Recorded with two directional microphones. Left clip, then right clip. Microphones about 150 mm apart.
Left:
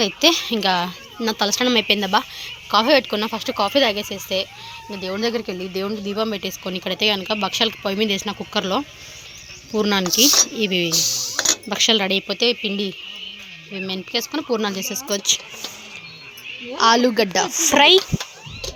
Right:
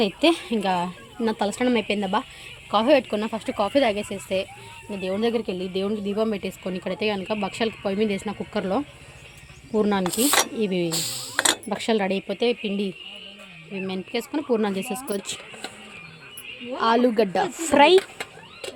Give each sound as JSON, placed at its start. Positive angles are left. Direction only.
{"t": 0.0, "sound": "a woman's voice", "side_deg": -15}
{"t": 10.9, "sound": "a sound", "side_deg": -40}
{"t": 11.4, "sound": "speech", "side_deg": -10}
{"t": 14.5, "sound": "speech", "side_deg": -25}
{"t": 16.7, "sound": "speech", "side_deg": 0}